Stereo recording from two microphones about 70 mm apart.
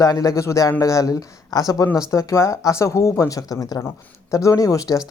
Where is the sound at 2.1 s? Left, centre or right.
Left.